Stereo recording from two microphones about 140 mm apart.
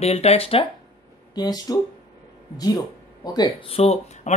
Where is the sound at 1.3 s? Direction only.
30° left (ahead or behind).